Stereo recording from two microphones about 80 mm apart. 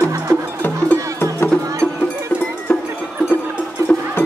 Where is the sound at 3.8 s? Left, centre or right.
Right.